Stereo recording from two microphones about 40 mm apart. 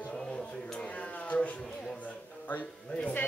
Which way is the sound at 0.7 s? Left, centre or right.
Left.